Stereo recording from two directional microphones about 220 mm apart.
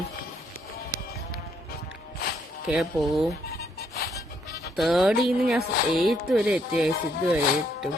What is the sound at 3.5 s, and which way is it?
Music, 45° left (ahead or behind).